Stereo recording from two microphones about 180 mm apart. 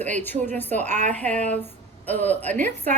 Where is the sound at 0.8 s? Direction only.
40° right (ahead or behind).